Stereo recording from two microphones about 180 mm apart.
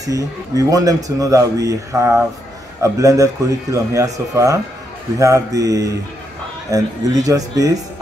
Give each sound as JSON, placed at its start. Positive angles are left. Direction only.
{"t": 0.0, "sound": "speech", "side_deg": -20}